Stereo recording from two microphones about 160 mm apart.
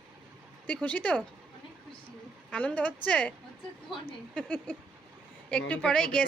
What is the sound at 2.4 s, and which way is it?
Speech, 10° left (ahead or behind).